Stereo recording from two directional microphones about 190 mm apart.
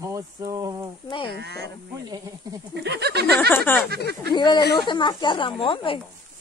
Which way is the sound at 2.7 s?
60° right (ahead or behind).